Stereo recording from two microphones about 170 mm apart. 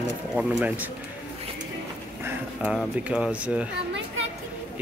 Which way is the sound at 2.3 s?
5° right (ahead or behind).